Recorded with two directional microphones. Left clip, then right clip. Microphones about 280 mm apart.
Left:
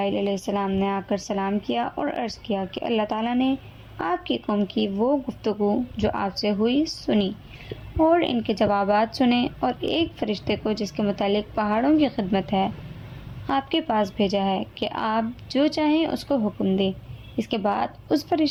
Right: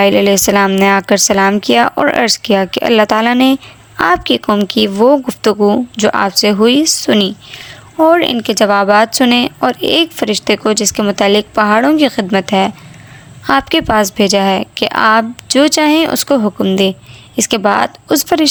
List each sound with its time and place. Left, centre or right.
0.0 s speech: right